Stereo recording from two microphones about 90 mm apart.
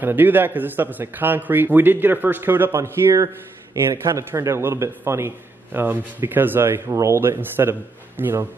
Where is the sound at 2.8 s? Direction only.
35° right (ahead or behind).